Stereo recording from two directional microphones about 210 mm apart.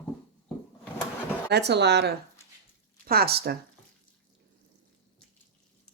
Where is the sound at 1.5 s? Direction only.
50° right (ahead or behind).